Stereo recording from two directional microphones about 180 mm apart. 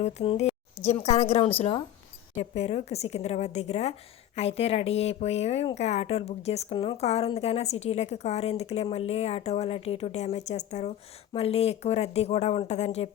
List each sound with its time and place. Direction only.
0.0 s speech: 35° left (ahead or behind)